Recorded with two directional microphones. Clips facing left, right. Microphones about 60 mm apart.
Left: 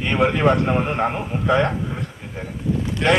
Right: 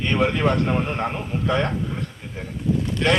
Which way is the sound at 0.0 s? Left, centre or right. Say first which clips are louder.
Left 3 dB; centre.